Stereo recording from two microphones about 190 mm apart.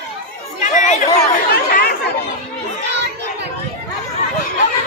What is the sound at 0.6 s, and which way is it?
Chatter, 40° left (ahead or behind).